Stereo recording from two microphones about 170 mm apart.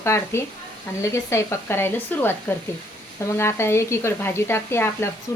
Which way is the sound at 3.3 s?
15° left (ahead or behind).